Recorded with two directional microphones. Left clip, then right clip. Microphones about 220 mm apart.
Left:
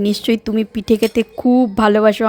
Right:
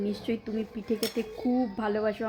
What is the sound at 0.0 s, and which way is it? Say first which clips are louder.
Speech: left 14 dB; 50° left (ahead or behind).